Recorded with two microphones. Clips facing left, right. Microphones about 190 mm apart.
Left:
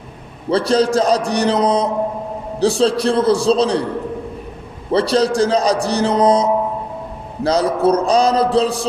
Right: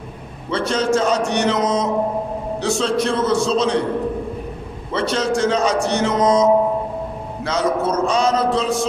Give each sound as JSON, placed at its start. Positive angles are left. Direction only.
{"t": 0.5, "sound": "a man's voice", "side_deg": 35}
{"t": 4.9, "sound": "a man's voice", "side_deg": 35}